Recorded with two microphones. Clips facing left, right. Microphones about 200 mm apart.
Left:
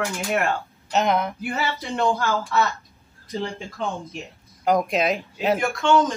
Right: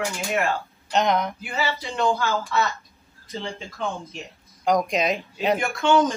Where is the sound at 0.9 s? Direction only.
5° left (ahead or behind).